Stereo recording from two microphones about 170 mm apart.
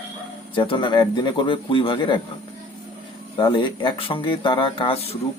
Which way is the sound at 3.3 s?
25° left (ahead or behind).